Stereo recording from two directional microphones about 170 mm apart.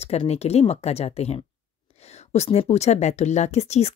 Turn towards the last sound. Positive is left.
turn(degrees=40)  # may be behind; listen again after turning